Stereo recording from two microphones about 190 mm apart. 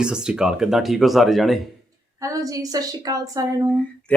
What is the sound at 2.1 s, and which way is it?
A woman's voice, 15° right (ahead or behind).